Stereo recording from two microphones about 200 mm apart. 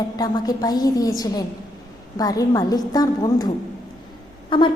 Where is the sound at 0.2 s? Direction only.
20° left (ahead or behind).